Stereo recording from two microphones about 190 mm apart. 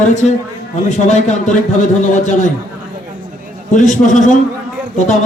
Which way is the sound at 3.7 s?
40° left (ahead or behind).